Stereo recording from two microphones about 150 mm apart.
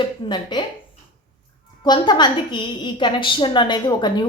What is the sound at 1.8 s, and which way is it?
A woman's voice, 30° left (ahead or behind).